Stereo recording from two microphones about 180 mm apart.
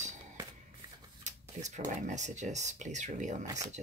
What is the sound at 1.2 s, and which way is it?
Speech, 40° right (ahead or behind).